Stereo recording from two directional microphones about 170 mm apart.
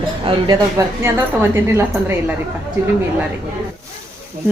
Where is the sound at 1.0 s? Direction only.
15° right (ahead or behind).